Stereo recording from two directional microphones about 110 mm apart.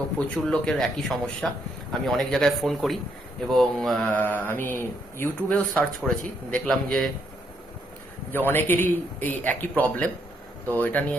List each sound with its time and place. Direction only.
0.4 s a man's voice: 5° left (ahead or behind)
4.1 s speech: 15° left (ahead or behind)
6.0 s a man's voice: 5° left (ahead or behind)
8.3 s a man's voice: 20° left (ahead or behind)